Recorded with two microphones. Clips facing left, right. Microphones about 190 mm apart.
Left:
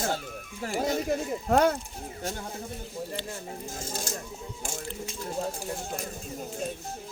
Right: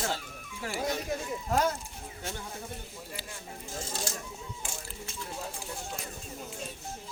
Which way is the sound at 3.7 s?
45° left (ahead or behind).